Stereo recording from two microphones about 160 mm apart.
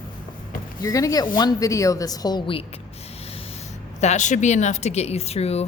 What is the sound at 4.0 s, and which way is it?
A woman's voice, 45° left (ahead or behind).